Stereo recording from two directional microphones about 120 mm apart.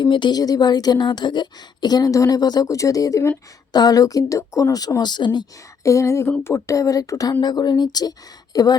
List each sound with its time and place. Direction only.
0.0 s a woman's voice: 40° left (ahead or behind)
5.8 s a sound: 25° left (ahead or behind)
7.4 s a woman's voice: 35° left (ahead or behind)